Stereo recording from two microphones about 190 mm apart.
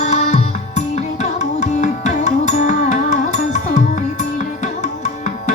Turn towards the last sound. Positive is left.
turn(degrees=40)  # may be behind; listen again after turning